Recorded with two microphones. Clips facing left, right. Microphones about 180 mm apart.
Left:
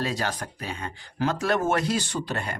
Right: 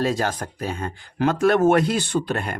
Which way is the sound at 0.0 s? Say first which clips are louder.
Right 6 dB; 45° right (ahead or behind).